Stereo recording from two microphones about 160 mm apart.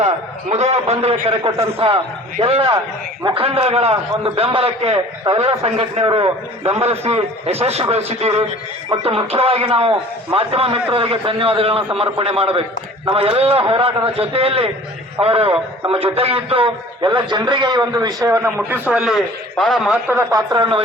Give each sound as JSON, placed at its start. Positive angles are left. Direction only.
{"t": 0.5, "sound": "a man's voice", "side_deg": -40}
{"t": 18.7, "sound": "a man's voice", "side_deg": -5}
{"t": 20.1, "sound": "a man's voice", "side_deg": -20}